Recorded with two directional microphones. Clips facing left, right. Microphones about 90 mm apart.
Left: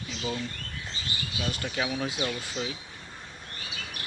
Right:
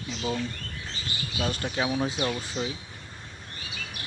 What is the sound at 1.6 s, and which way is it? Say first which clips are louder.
Speech: right 3 dB; 20° right (ahead or behind).